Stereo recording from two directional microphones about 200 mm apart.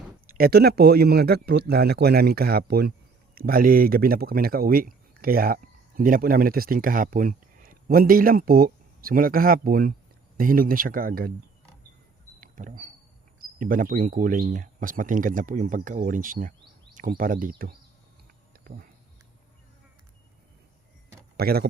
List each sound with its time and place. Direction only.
0.3 s speech: 50° right (ahead or behind)
12.4 s a sound: 40° right (ahead or behind)
13.4 s speech: 45° right (ahead or behind)
21.3 s speech: 50° right (ahead or behind)